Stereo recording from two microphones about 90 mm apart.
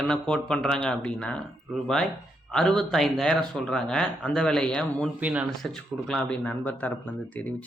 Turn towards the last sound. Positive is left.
turn(degrees=15)  # may be behind; listen again after turning